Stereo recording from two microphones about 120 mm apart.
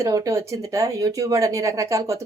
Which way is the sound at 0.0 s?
30° right (ahead or behind).